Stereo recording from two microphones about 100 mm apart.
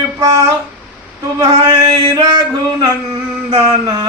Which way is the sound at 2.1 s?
40° right (ahead or behind).